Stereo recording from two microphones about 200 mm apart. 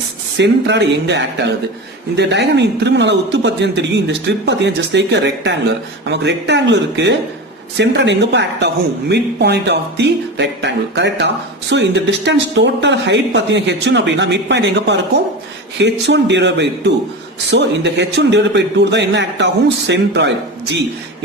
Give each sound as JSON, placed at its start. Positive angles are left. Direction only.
{"t": 0.3, "sound": "speech", "side_deg": -60}